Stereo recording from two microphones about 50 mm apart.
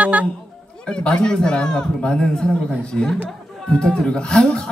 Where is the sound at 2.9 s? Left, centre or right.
Centre.